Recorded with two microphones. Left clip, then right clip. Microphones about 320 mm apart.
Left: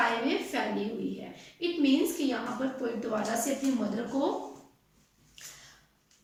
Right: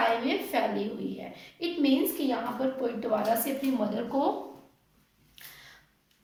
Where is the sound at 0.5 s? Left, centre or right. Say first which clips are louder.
Right 3 dB; centre.